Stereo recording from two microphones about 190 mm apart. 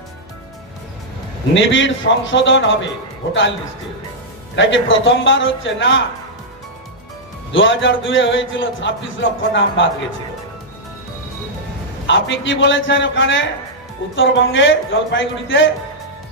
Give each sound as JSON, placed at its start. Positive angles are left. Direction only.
{"t": 1.5, "sound": "a man's voice", "side_deg": 75}
{"t": 4.6, "sound": "a man's voice", "side_deg": 80}
{"t": 7.5, "sound": "a man's voice", "side_deg": 90}
{"t": 12.1, "sound": "a man's voice", "side_deg": 75}